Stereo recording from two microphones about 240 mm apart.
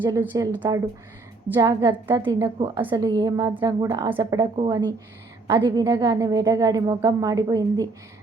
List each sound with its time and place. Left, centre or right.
0.0 s a woman's voice: centre